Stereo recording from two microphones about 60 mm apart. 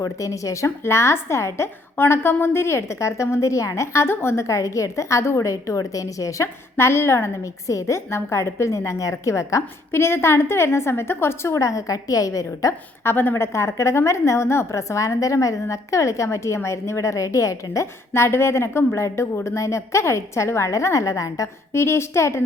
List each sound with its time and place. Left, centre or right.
0.0 s a woman's voice: left
4.0 s a woman's voice: left
6.7 s a woman's voice: left
7.7 s a woman's voice: left
9.9 s a woman's voice: left
13.1 s a woman's voice: left
18.1 s a woman's voice: left
21.7 s a woman's voice: left